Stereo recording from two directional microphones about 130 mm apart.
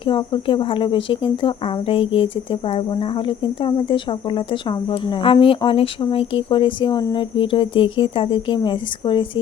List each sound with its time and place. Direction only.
0.0 s speech: 40° left (ahead or behind)